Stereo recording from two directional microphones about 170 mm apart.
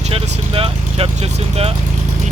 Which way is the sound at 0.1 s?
35° right (ahead or behind).